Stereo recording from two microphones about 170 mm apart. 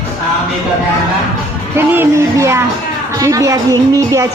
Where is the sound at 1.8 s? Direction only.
15° right (ahead or behind).